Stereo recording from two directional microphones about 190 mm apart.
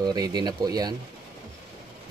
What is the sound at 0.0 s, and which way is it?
Speech, 20° right (ahead or behind).